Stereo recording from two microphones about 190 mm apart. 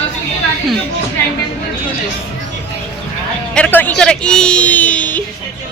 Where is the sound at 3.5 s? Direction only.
10° left (ahead or behind).